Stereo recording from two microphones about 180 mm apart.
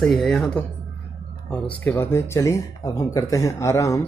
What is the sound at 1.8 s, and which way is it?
Speech, 15° left (ahead or behind).